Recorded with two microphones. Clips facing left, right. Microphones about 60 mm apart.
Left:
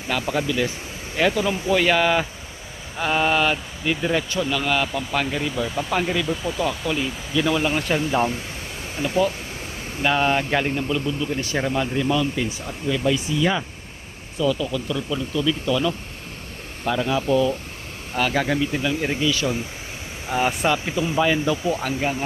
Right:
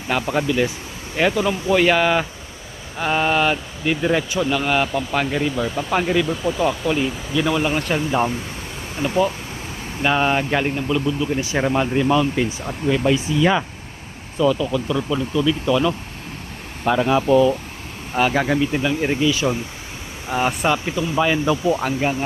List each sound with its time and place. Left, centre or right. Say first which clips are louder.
0.1 s speech: right 3 dB; right
1.1 s speech: right 2 dB; centre
11.6 s speech: right 5 dB; right
14.6 s speech: right 4 dB; right
16.8 s speech: right 5 dB; right
18.2 s speech: right 3 dB; centre
20.3 s speech: right 1 dB; centre
21.4 s speech: right 4 dB; right